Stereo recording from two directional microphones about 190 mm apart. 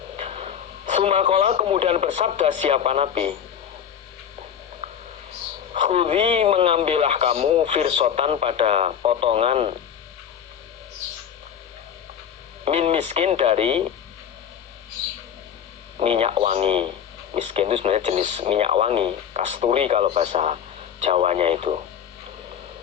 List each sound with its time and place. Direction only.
0.2 s speech: 35° right (ahead or behind)
5.7 s a man's voice: 30° right (ahead or behind)
12.6 s a man's voice: 30° right (ahead or behind)
16.0 s a man's voice: 30° right (ahead or behind)